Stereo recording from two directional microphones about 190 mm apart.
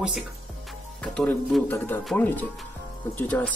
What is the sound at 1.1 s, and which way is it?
Speech, 5° left (ahead or behind).